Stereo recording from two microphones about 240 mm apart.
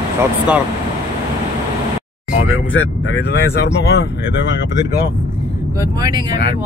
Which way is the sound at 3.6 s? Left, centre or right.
Left.